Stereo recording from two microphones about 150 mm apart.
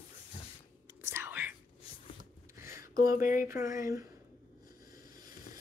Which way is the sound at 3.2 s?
65° left (ahead or behind).